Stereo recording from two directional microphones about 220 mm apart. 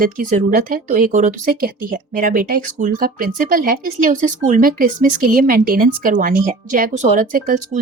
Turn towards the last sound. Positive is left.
turn(degrees=-40)  # may be behind; listen again after turning